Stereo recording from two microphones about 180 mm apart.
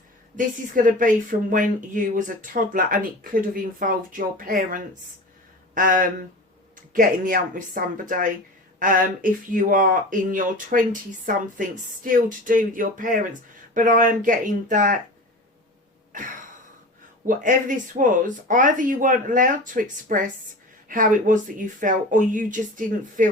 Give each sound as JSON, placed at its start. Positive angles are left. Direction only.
{"t": 0.9, "sound": "speech", "side_deg": -50}
{"t": 17.2, "sound": "speech", "side_deg": -45}